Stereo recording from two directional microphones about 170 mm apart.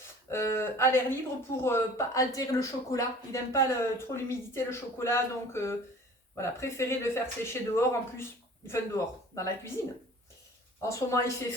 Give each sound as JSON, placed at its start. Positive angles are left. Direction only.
{"t": 0.3, "sound": "speech", "side_deg": 15}
{"t": 10.8, "sound": "speech", "side_deg": 20}